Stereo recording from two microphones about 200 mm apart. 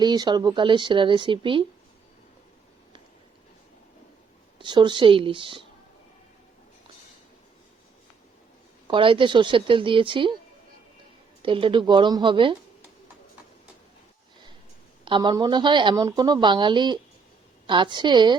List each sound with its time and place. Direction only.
0.0 s a woman's voice: 20° right (ahead or behind)
4.5 s a woman's voice: 25° right (ahead or behind)
8.9 s a woman's voice: 25° right (ahead or behind)
11.4 s a woman's voice: 25° right (ahead or behind)
15.0 s a woman's voice: 20° right (ahead or behind)